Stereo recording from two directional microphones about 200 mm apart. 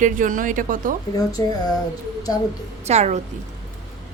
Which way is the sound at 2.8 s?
35° right (ahead or behind).